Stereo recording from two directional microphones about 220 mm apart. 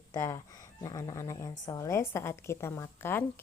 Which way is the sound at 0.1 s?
15° left (ahead or behind).